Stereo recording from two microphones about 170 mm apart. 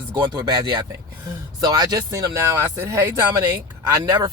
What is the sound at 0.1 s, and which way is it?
Speech, 20° right (ahead or behind).